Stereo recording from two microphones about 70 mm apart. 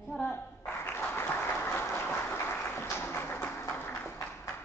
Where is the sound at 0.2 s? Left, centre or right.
Left.